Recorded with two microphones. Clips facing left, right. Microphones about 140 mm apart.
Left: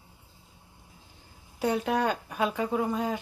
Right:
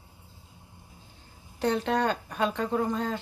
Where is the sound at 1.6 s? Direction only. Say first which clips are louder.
Even; 5° left (ahead or behind).